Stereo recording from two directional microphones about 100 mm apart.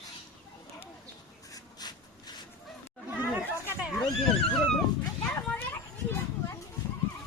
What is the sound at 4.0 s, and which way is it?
Neigh, 5° left (ahead or behind).